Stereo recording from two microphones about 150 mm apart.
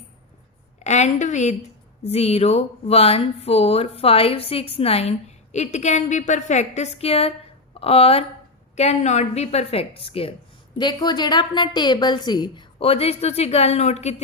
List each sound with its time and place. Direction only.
0.9 s a woman's voice: 50° left (ahead or behind); by 12.6 s 30° left (ahead or behind)
12.8 s speech: 40° left (ahead or behind)